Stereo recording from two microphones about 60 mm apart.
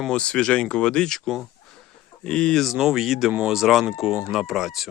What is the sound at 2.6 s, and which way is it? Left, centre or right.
Speech, centre.